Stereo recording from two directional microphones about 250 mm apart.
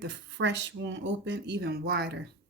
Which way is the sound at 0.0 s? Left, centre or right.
Right.